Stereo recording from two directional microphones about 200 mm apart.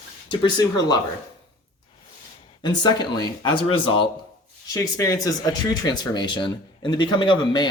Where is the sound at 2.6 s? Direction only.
20° left (ahead or behind).